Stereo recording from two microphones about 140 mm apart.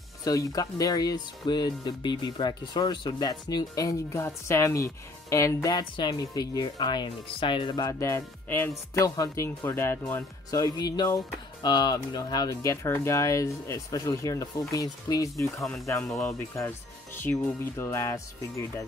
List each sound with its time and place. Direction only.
0.2 s speech: 25° left (ahead or behind)
15.6 s speech: centre (ahead or behind)
16.3 s speech: 15° left (ahead or behind)